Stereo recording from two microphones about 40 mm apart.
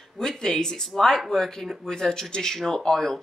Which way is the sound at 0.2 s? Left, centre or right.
Centre.